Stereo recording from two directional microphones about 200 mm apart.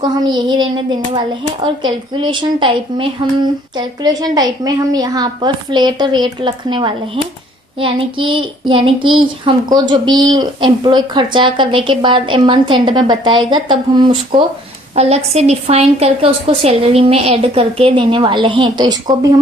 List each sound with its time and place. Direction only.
0.0 s a child's voice: 20° right (ahead or behind)
15.0 s a child's voice: 30° right (ahead or behind)